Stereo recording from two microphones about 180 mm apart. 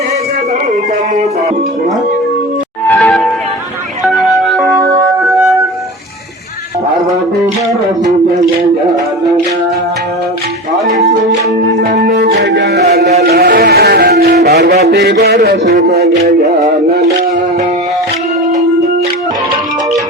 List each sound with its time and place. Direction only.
3.0 s music: centre (ahead or behind)
4.8 s music: 15° right (ahead or behind)
11.8 s music: 55° right (ahead or behind)
14.4 s a sound: 65° right (ahead or behind)